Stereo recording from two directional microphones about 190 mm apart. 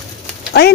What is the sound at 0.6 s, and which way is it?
Speech, 60° left (ahead or behind).